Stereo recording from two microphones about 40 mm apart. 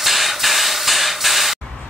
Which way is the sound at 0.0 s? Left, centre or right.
Centre.